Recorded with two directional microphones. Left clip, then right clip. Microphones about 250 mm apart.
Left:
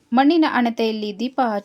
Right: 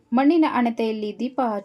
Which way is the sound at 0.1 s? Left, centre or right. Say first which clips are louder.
Left 3 dB; centre.